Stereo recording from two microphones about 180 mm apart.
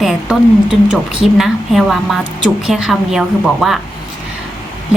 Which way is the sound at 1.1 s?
Centre (ahead or behind).